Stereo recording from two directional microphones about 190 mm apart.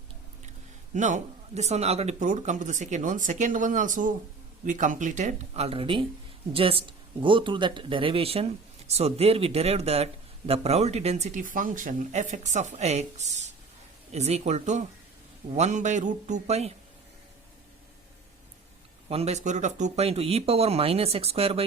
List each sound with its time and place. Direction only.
0.9 s speech: 40° right (ahead or behind)
19.0 s speech: 35° right (ahead or behind)